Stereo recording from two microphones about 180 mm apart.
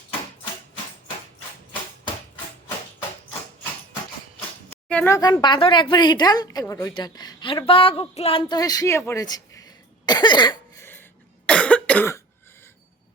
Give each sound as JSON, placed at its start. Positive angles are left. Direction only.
{"t": 4.9, "sound": "speech", "side_deg": 10}
{"t": 10.8, "sound": "cough", "side_deg": 10}